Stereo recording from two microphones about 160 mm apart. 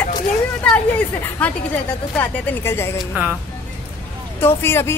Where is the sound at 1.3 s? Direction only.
10° left (ahead or behind).